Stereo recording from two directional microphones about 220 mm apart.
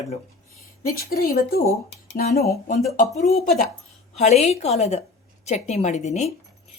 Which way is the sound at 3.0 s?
30° left (ahead or behind).